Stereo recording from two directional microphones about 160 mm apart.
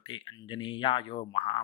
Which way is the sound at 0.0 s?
30° left (ahead or behind).